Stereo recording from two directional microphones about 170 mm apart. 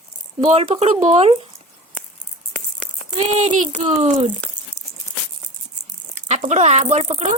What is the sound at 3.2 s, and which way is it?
Speech, 35° right (ahead or behind).